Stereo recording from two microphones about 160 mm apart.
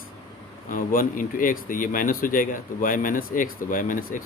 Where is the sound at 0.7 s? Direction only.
60° left (ahead or behind).